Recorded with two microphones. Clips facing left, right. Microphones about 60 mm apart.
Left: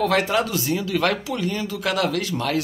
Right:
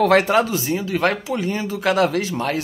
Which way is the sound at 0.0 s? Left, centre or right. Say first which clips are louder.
Right 5 dB; right.